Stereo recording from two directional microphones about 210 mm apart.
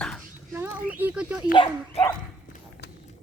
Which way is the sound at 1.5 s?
25° left (ahead or behind).